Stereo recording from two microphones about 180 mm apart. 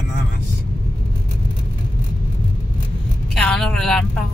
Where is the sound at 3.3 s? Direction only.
5° left (ahead or behind).